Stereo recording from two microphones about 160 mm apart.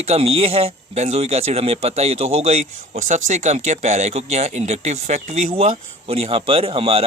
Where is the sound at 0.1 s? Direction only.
40° right (ahead or behind).